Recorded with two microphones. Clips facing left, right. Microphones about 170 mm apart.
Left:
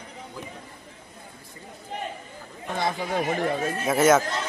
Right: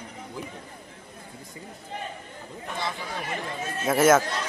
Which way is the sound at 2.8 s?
50° left (ahead or behind).